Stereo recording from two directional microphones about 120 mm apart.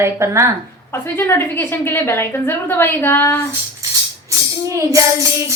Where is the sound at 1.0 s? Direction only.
20° left (ahead or behind).